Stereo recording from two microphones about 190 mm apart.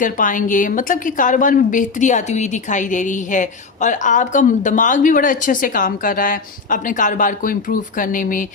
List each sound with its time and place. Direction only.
0.0 s a woman's voice: 45° left (ahead or behind)